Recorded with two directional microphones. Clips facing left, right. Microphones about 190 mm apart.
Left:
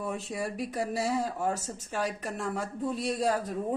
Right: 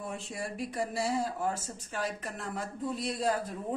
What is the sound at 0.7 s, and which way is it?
Speech, 40° left (ahead or behind).